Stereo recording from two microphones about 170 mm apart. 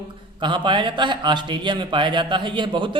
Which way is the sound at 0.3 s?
30° right (ahead or behind).